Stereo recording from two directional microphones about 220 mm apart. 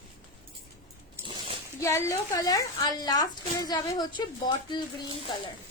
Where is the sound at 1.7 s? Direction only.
10° left (ahead or behind).